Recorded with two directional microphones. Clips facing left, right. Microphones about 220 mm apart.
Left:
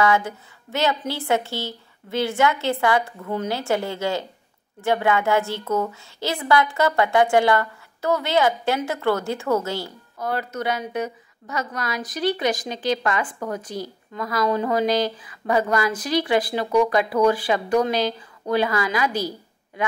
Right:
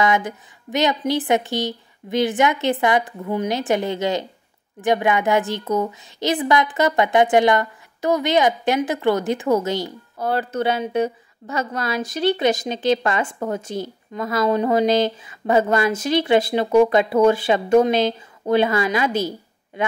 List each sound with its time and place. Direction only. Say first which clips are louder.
0.0 s a woman's voice: even; 20° right (ahead or behind)
10.1 s a woman's voice: right 4 dB; 30° right (ahead or behind)